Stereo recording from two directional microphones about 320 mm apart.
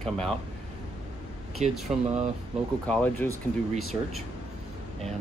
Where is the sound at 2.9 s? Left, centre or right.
Centre.